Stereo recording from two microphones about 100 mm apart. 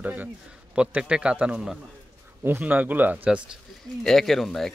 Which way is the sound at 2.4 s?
20° right (ahead or behind).